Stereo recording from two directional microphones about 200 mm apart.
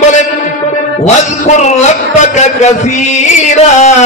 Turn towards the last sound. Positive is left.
turn(degrees=35)  # may be behind; listen again after turning